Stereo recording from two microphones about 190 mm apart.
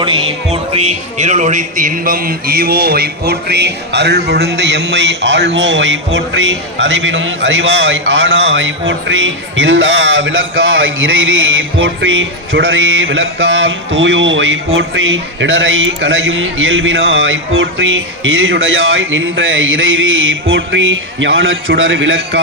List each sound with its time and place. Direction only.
0.0 s speech: 30° right (ahead or behind); by 10.3 s 70° right (ahead or behind)
11.0 s a man's voice: 90° right